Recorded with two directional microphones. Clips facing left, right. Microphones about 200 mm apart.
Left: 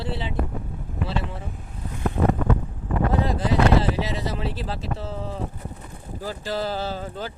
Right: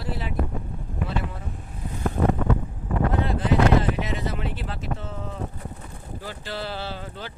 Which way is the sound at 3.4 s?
30° left (ahead or behind).